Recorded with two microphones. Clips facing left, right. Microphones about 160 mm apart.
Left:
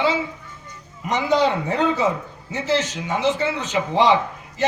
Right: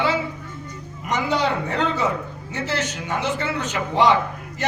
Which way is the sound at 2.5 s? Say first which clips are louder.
Left 4 dB; 20° left (ahead or behind).